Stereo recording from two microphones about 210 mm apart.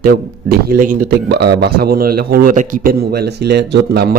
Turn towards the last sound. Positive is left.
turn(degrees=-50)  # may be behind; listen again after turning